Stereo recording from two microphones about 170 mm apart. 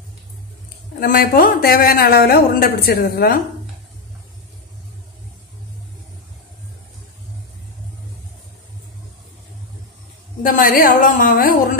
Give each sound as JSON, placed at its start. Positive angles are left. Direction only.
{"t": 0.9, "sound": "a woman's voice", "side_deg": 60}
{"t": 10.4, "sound": "a woman's voice", "side_deg": 55}